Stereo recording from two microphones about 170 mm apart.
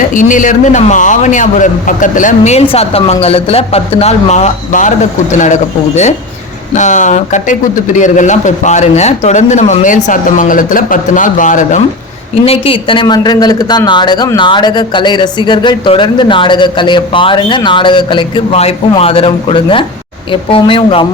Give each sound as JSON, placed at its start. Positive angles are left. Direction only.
{"t": 0.1, "sound": "a man's voice", "side_deg": 50}
{"t": 6.7, "sound": "a man's voice", "side_deg": 45}
{"t": 12.5, "sound": "a man's voice", "side_deg": 30}